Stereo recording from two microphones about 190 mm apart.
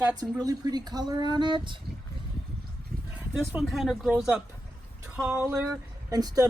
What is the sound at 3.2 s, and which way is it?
Speech, 10° right (ahead or behind).